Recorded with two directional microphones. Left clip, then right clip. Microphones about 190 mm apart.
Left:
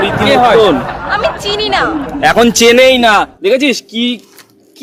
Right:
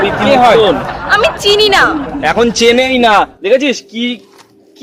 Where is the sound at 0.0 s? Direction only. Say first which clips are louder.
Even; centre (ahead or behind).